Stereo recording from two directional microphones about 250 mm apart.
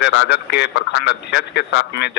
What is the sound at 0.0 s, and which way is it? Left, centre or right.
A man's voice, left.